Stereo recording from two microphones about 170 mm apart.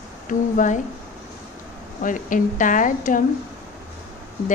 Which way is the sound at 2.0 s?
50° left (ahead or behind).